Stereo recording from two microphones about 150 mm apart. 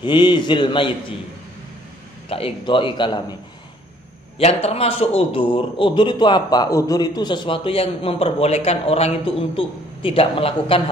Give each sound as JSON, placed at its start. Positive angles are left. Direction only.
{"t": 0.0, "sound": "a man's voice", "side_deg": 30}
{"t": 2.2, "sound": "a man's voice", "side_deg": 40}
{"t": 4.4, "sound": "a man's voice", "side_deg": 45}